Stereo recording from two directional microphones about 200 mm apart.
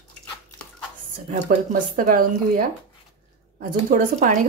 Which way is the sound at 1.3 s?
45° right (ahead or behind).